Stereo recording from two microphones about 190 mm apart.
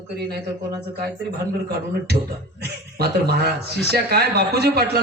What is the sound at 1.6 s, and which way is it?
A man's voice, 55° right (ahead or behind).